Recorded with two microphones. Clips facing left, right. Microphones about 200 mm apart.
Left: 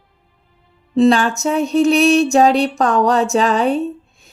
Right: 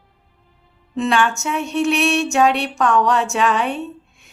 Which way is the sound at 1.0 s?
35° left (ahead or behind).